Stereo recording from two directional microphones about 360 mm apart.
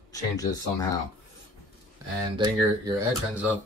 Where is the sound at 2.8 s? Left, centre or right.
Centre.